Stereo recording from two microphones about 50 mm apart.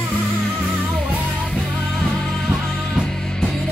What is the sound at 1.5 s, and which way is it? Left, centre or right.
Music, centre.